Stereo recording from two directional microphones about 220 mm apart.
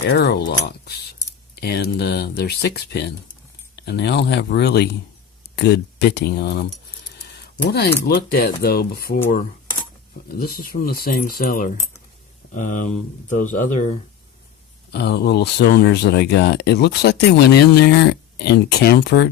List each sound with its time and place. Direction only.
0.1 s speech: 50° left (ahead or behind)
10.3 s speech: 45° left (ahead or behind)
14.8 s speech: 50° left (ahead or behind)